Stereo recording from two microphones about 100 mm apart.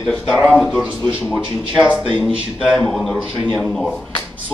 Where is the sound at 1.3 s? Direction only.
10° right (ahead or behind).